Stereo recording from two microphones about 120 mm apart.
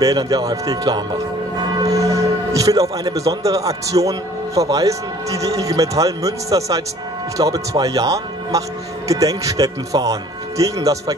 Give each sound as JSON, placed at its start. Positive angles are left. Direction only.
{"t": 0.0, "sound": "a man's voice", "side_deg": -30}